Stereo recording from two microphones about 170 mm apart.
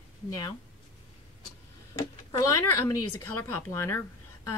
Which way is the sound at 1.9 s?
20° left (ahead or behind).